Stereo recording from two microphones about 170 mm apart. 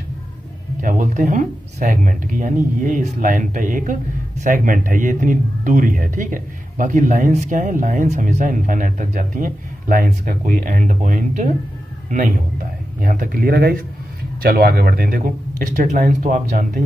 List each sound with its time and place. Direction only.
0.7 s a man's voice: 50° right (ahead or behind)